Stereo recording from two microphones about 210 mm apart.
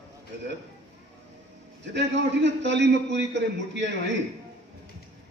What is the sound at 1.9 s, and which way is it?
A man's voice, 55° right (ahead or behind).